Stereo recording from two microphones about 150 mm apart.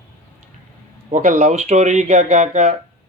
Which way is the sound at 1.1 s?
50° right (ahead or behind).